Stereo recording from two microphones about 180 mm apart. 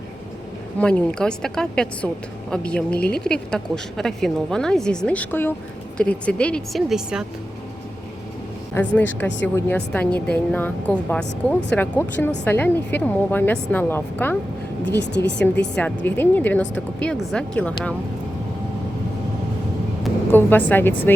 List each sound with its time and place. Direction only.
0.8 s a woman's voice: 5° left (ahead or behind)
8.7 s speech: 10° left (ahead or behind)
14.8 s a woman's voice: 75° left (ahead or behind)
15.4 s speech: 5° left (ahead or behind)
20.3 s speech: 10° left (ahead or behind)